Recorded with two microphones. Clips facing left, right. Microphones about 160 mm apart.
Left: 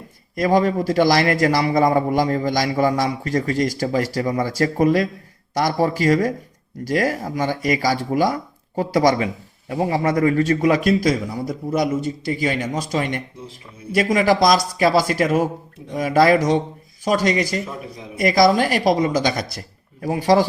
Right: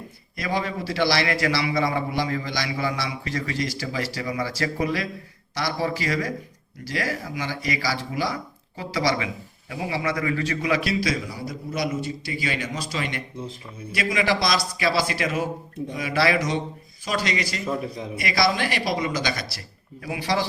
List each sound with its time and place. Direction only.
0.3 s speech: 45° left (ahead or behind)